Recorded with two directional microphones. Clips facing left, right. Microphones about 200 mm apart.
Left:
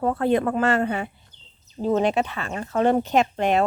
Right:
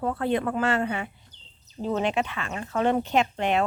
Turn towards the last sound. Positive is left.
turn(degrees=40)  # may be behind; listen again after turning